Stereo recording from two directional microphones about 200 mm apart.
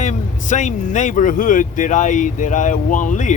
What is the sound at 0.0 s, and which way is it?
Speech, 35° left (ahead or behind).